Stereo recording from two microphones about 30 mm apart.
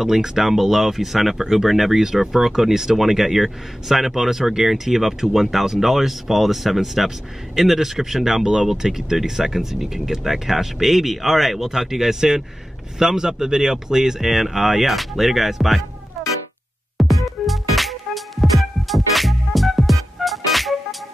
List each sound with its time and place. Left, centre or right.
0.0 s speech: centre
0.4 s speech: centre
2.0 s speech: centre
14.3 s speech: centre
16.9 s music: centre